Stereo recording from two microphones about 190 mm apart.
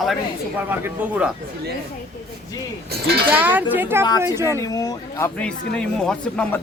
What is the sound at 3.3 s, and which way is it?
Speech, 10° right (ahead or behind).